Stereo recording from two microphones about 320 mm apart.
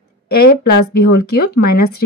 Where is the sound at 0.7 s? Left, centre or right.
Left.